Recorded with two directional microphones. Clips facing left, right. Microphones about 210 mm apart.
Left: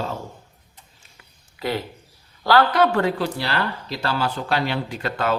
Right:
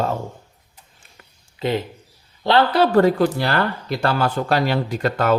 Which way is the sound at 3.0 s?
45° right (ahead or behind).